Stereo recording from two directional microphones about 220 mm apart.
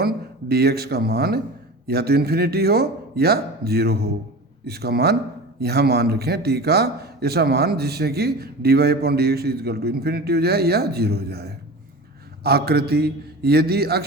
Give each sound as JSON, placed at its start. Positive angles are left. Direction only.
{"t": 0.0, "sound": "a man's voice", "side_deg": -45}